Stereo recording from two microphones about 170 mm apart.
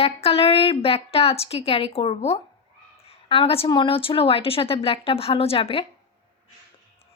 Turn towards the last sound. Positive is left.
turn(degrees=35)  # may be behind; listen again after turning